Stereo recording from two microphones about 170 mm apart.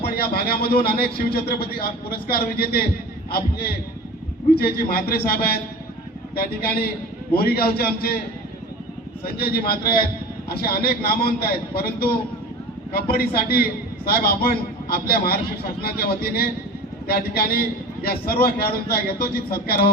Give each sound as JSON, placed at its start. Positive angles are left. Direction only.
{"t": 0.0, "sound": "a man's voice", "side_deg": 65}
{"t": 4.5, "sound": "a man's voice", "side_deg": 65}
{"t": 9.2, "sound": "a man's voice", "side_deg": 65}
{"t": 13.1, "sound": "a man's voice", "side_deg": 65}